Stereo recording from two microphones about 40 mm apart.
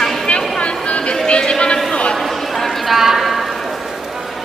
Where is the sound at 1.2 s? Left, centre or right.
Left.